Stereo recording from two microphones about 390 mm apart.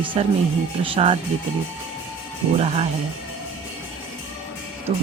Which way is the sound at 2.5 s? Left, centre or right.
Centre.